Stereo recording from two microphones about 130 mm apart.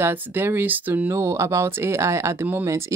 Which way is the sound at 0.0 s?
15° right (ahead or behind).